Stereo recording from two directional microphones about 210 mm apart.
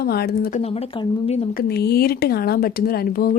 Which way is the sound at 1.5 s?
50° left (ahead or behind).